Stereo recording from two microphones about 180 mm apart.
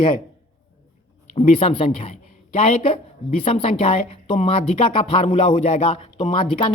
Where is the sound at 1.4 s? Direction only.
35° left (ahead or behind).